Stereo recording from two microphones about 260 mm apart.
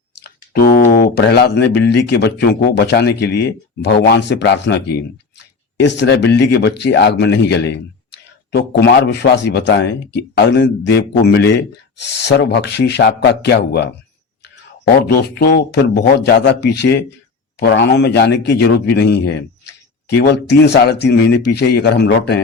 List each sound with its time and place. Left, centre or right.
0.2 s speech: left
15.0 s speech: left